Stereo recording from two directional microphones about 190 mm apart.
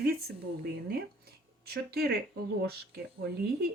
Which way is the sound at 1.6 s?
55° right (ahead or behind).